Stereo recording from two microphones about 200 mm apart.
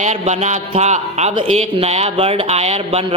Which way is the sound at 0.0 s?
35° right (ahead or behind).